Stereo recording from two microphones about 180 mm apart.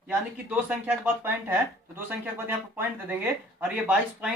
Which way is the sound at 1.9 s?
10° right (ahead or behind).